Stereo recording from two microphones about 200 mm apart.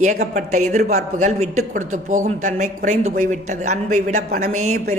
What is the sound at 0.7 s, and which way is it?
A woman's voice, 35° right (ahead or behind).